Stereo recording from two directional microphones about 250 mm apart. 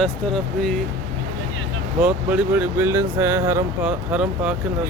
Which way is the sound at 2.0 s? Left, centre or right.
Centre.